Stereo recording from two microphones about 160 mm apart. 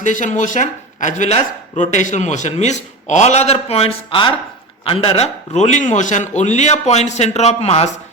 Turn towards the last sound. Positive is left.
turn(degrees=40)  # may be behind; listen again after turning